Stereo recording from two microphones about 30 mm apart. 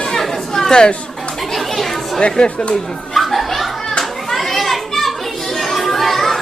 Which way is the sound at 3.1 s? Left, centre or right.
Centre.